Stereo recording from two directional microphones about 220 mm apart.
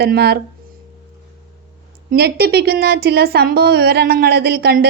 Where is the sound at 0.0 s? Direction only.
45° right (ahead or behind).